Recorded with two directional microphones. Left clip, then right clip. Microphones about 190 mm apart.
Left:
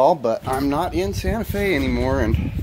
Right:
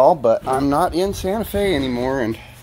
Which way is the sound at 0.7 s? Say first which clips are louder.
Right 5 dB; 35° right (ahead or behind).